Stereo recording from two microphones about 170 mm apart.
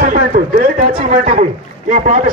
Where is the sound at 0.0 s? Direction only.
55° right (ahead or behind).